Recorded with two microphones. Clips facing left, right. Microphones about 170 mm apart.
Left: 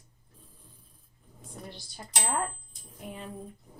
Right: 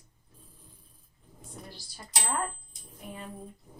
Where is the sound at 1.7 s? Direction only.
20° left (ahead or behind).